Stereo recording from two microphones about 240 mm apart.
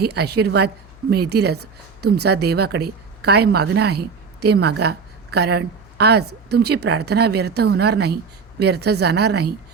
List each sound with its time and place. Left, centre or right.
0.0 s speech: right